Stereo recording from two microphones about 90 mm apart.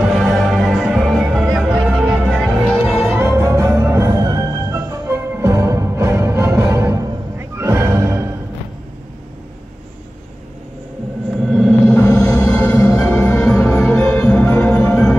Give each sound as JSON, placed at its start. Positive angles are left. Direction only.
{"t": 0.0, "sound": "music", "side_deg": 0}
{"t": 3.3, "sound": "music", "side_deg": -30}
{"t": 5.1, "sound": "music", "side_deg": -30}
{"t": 11.2, "sound": "music", "side_deg": 0}
{"t": 11.8, "sound": "music", "side_deg": 25}
{"t": 12.8, "sound": "music", "side_deg": 30}